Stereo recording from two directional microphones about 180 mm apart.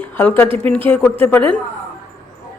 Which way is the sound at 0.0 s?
10° left (ahead or behind).